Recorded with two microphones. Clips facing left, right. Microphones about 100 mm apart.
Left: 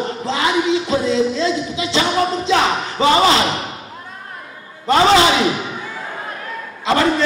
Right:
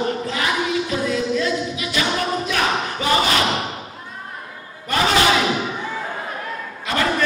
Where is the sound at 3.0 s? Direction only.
25° left (ahead or behind).